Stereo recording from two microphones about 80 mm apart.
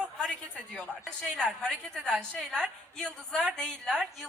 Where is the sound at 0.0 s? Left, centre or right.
Centre.